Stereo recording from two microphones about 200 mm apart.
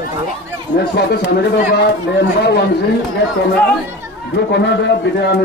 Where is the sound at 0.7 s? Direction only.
55° left (ahead or behind).